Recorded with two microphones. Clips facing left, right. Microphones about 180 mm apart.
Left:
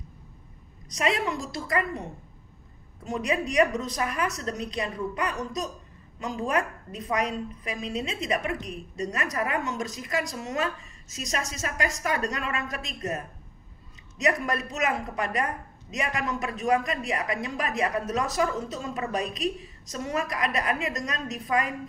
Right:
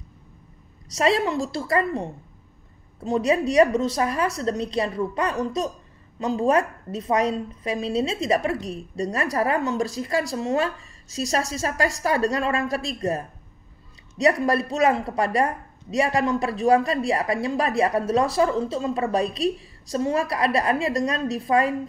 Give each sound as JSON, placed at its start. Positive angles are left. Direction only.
{"t": 0.9, "sound": "a woman's voice", "side_deg": -35}